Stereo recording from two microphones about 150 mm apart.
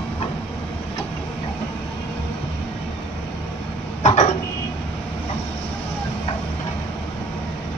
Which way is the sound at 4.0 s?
45° left (ahead or behind).